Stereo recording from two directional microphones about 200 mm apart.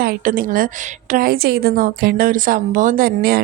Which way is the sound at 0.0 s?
45° right (ahead or behind).